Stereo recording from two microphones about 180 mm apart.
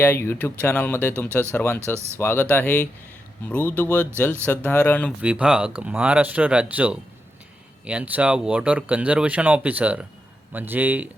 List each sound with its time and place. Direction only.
0.0 s speech: 10° left (ahead or behind)
5.2 s speech: 5° right (ahead or behind)